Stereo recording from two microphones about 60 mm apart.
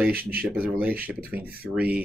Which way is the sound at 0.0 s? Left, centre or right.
Right.